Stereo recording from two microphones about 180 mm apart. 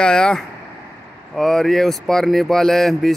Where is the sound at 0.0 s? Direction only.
5° left (ahead or behind).